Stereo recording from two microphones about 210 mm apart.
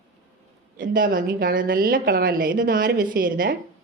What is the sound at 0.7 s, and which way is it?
A woman's voice, 40° right (ahead or behind).